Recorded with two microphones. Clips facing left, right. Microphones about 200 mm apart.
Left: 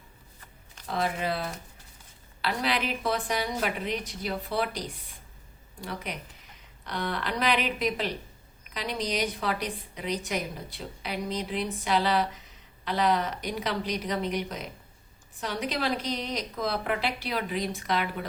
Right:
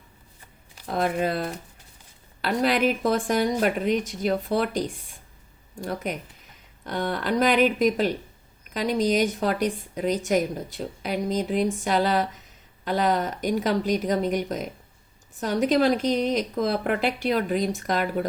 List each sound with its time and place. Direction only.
0.9 s a woman's voice: 50° right (ahead or behind)